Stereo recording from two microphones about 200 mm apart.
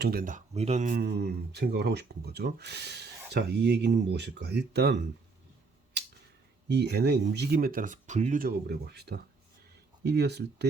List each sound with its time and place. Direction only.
0.0 s speech: 45° right (ahead or behind)
1.0 s speech: 55° right (ahead or behind)
6.7 s speech: 55° right (ahead or behind)